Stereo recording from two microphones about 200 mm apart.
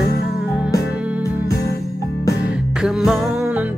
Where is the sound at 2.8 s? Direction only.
Centre (ahead or behind).